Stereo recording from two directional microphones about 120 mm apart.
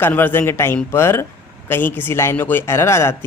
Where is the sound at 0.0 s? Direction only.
15° left (ahead or behind).